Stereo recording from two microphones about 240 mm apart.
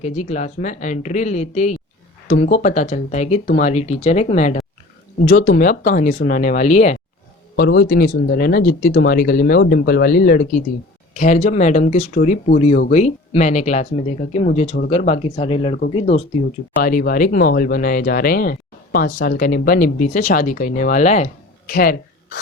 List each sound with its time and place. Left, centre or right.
0.0 s speech: left
7.5 s speech: left
16.8 s speech: left
21.7 s a sound: left